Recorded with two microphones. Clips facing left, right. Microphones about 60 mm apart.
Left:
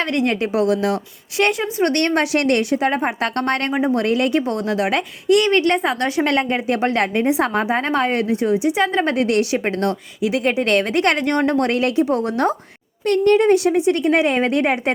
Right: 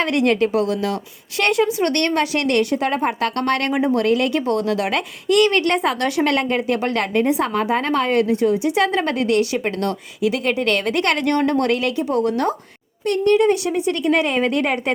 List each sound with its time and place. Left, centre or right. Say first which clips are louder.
0.0 s speech: right 2 dB; centre
0.3 s a woman's voice: left 1 dB; left
1.4 s a woman's voice: right 1 dB; centre
1.8 s a woman's voice: left 1 dB; centre
2.8 s a woman's voice: even; centre
3.6 s a woman's voice: even; centre
3.9 s a woman's voice: even; left
6.7 s a woman's voice: left 2 dB; left; by 9.0 s centre
9.0 s a woman's voice: left 1 dB; left
11.4 s a woman's voice: left 1 dB; left